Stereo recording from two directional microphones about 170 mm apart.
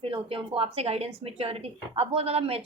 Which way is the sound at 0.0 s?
35° right (ahead or behind).